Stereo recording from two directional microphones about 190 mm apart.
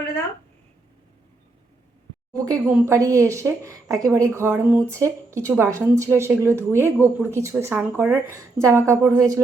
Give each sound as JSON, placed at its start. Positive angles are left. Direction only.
{"t": 2.3, "sound": "speech", "side_deg": -20}